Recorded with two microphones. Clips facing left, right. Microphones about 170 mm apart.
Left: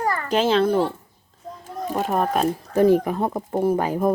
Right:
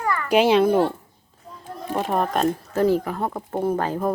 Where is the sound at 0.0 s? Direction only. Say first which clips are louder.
Left 1 dB; 35° left (ahead or behind).